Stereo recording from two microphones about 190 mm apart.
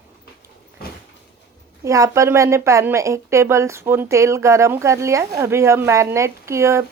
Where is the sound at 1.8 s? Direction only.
15° right (ahead or behind).